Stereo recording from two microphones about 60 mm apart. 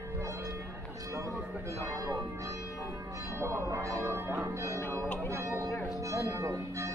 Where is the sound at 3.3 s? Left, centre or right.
Right.